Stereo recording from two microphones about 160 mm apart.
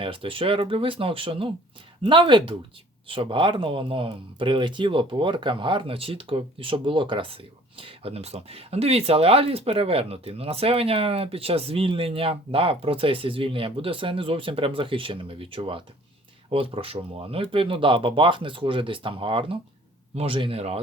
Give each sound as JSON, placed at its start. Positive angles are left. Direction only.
{"t": 0.0, "sound": "speech", "side_deg": -35}